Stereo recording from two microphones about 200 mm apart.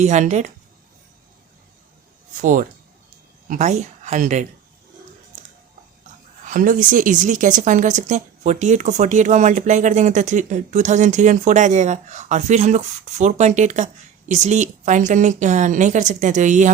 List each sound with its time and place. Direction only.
0.0 s speech: 35° right (ahead or behind)
2.4 s speech: 40° right (ahead or behind)
6.4 s speech: 40° right (ahead or behind)